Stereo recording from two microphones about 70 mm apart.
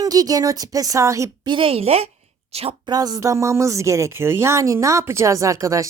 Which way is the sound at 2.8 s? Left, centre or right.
Right.